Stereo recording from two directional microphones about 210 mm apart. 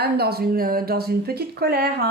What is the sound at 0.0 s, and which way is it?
Speech, 50° right (ahead or behind).